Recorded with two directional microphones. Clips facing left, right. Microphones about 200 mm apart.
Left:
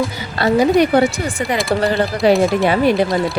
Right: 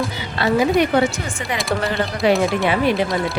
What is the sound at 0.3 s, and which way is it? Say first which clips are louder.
A woman's voice: left 4 dB; 40° left (ahead or behind).